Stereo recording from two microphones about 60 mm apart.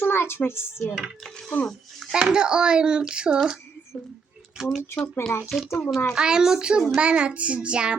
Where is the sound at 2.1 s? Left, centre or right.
Centre.